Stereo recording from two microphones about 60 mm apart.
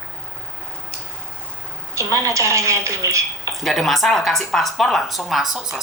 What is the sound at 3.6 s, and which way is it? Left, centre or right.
Speech, centre.